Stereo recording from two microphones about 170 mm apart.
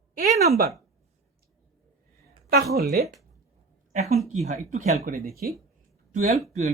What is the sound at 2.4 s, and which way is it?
Speech, 65° right (ahead or behind).